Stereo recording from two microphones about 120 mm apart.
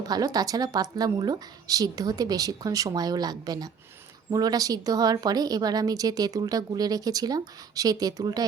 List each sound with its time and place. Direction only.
0.1 s a woman's voice: 30° right (ahead or behind)